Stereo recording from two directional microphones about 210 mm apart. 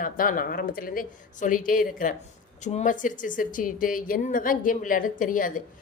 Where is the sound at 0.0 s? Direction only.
40° left (ahead or behind).